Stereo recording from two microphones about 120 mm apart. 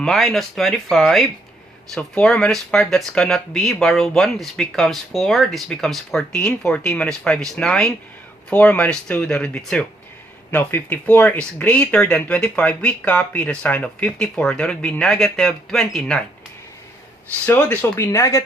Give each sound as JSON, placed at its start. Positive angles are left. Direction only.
{"t": 0.0, "sound": "speech", "side_deg": 0}
{"t": 17.4, "sound": "speech", "side_deg": 15}